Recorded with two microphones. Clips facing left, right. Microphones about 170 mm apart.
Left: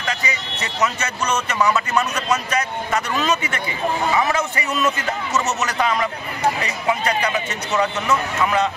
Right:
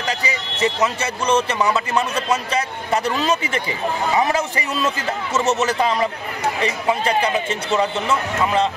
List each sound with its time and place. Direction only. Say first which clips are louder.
0.1 s a man's voice: left 1 dB; 30° right (ahead or behind)